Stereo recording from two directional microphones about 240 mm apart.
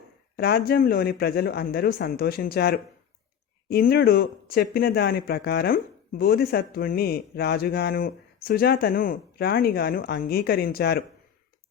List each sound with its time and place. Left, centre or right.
0.3 s speech: left